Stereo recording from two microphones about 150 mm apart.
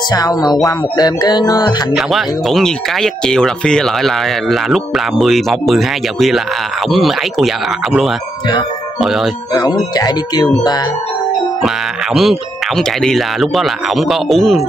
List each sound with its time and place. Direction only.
0.1 s music: 25° left (ahead or behind)
2.0 s speech: centre (ahead or behind)
9.5 s music: 25° left (ahead or behind)
11.6 s speech: centre (ahead or behind)